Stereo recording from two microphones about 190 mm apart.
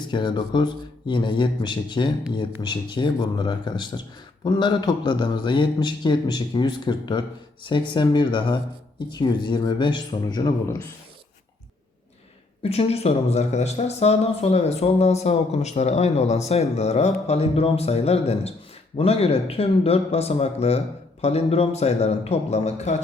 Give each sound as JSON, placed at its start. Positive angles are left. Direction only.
{"t": 0.1, "sound": "a man's voice", "side_deg": 25}
{"t": 12.6, "sound": "speech", "side_deg": 30}